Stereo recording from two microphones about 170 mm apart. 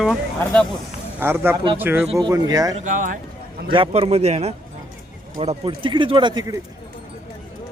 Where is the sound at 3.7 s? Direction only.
30° right (ahead or behind).